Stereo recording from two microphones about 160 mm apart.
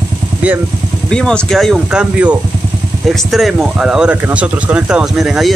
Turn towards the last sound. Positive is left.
turn(degrees=0)  # may be behind; listen again after turning